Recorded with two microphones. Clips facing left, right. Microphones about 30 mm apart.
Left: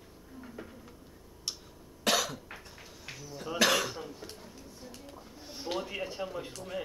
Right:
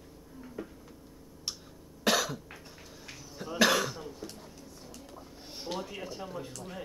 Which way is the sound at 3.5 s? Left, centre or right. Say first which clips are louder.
Right 1 dB; centre.